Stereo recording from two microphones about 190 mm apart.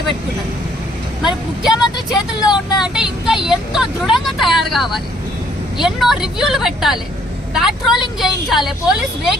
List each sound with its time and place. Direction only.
1.6 s speech: 5° right (ahead or behind)
2.4 s speech: 20° left (ahead or behind)
2.8 s speech: 5° right (ahead or behind)